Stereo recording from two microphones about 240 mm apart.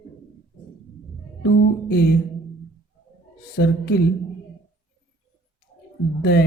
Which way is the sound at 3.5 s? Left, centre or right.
Left.